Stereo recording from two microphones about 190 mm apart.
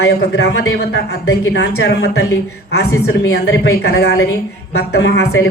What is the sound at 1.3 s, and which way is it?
Speech, 80° left.